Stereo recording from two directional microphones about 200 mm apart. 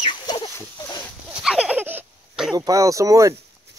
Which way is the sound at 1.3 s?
5° right (ahead or behind).